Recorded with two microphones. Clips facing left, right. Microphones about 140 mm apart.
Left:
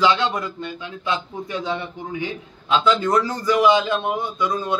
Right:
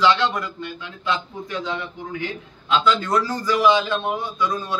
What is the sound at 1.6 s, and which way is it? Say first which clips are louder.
A man's voice: left 2 dB; 20° left (ahead or behind).